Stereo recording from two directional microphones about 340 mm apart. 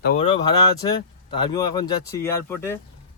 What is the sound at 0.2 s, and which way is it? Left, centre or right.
Speech, centre.